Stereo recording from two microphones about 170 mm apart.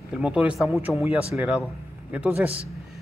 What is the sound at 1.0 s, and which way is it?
Speech, 10° right (ahead or behind).